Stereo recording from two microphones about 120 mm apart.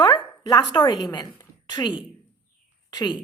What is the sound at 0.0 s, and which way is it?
A woman's voice, 35° left (ahead or behind).